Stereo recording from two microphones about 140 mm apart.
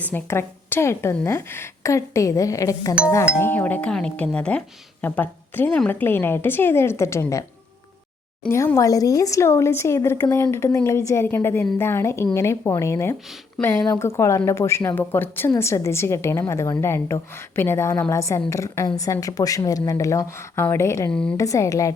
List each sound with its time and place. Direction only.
0.0 s chime: 15° left (ahead or behind)
1.1 s speech: 15° left (ahead or behind)
3.3 s chime: 15° left (ahead or behind)
8.4 s speech: 20° left (ahead or behind)
21.1 s a woman's voice: 5° left (ahead or behind)
21.3 s speech: 25° left (ahead or behind)